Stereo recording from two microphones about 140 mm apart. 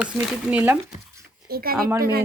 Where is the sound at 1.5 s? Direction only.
90° right.